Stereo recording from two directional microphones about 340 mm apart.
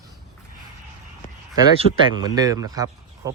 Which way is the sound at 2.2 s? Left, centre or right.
Centre.